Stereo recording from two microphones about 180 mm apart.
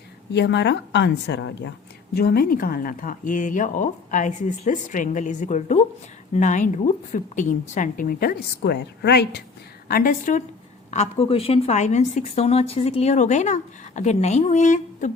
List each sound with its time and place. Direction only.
0.3 s a woman's voice: 70° left (ahead or behind)
2.1 s speech: 60° left (ahead or behind)
9.9 s a woman's voice: 50° left (ahead or behind)